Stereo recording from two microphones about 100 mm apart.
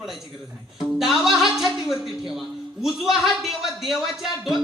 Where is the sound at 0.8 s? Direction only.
5° right (ahead or behind).